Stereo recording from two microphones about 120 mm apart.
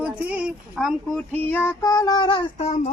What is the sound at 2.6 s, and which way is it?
Speech, 65° left (ahead or behind).